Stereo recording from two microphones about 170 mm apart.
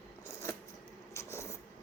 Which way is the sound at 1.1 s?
15° left (ahead or behind).